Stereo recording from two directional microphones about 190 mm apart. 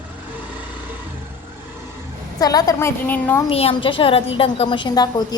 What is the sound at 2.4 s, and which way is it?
A woman's voice, 20° left (ahead or behind).